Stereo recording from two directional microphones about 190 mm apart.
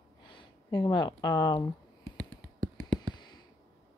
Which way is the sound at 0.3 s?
25° left (ahead or behind).